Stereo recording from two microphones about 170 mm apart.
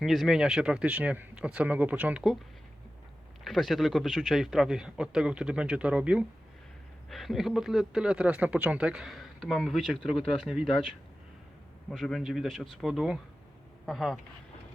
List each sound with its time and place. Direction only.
0.0 s speech: centre (ahead or behind)
3.4 s speech: centre (ahead or behind)
11.9 s speech: centre (ahead or behind)